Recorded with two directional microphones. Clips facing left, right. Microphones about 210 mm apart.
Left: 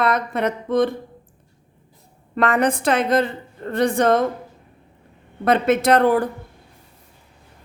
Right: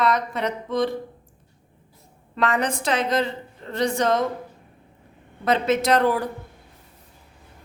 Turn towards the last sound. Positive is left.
turn(degrees=55)  # may be behind; listen again after turning